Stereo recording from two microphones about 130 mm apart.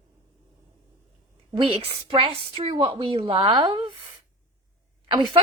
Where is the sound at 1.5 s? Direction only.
45° right (ahead or behind).